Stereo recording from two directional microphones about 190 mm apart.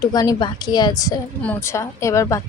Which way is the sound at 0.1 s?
20° left (ahead or behind).